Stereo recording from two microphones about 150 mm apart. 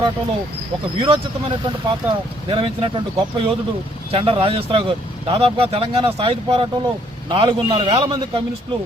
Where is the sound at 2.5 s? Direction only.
35° right (ahead or behind).